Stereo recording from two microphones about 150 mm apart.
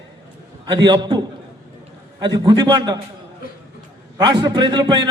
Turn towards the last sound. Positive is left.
turn(degrees=-30)  # may be behind; listen again after turning